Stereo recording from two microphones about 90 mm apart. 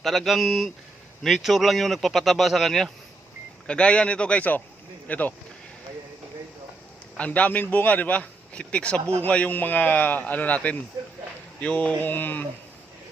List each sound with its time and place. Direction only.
0.0 s a man's voice: centre (ahead or behind); by 5.3 s 15° left (ahead or behind)
7.2 s a man's voice: 15° left (ahead or behind)